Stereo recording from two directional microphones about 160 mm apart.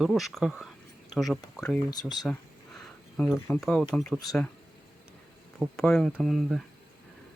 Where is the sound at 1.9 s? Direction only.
25° left (ahead or behind).